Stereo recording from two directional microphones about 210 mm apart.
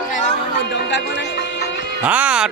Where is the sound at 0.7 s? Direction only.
55° left (ahead or behind).